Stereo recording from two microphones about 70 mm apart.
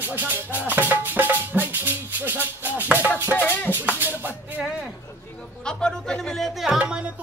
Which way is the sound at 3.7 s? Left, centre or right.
Right.